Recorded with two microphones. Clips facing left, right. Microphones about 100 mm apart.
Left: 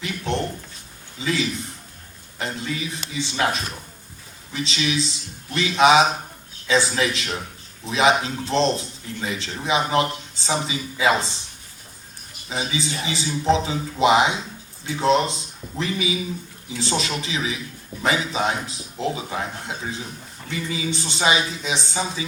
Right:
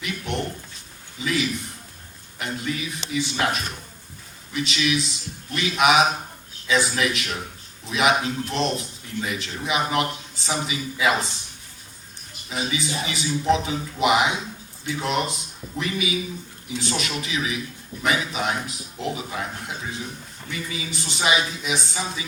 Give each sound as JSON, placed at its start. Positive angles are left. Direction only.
{"t": 0.0, "sound": "a sound", "side_deg": 30}
{"t": 1.2, "sound": "a man's voice", "side_deg": 30}
{"t": 12.5, "sound": "a man's voice", "side_deg": 30}
{"t": 20.5, "sound": "a man's voice", "side_deg": 30}